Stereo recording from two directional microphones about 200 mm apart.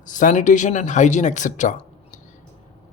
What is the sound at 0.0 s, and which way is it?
A man's voice, 40° left (ahead or behind).